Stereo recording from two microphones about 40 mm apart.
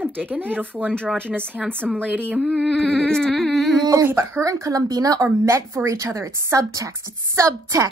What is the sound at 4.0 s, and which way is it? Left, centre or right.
Speech, right.